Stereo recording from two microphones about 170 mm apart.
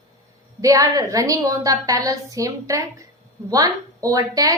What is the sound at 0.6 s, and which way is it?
A woman's voice, 20° right (ahead or behind).